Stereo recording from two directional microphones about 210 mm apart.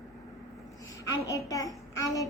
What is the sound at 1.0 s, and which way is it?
Child singing, 15° left (ahead or behind).